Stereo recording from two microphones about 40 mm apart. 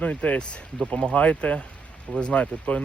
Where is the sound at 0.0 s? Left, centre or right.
Left.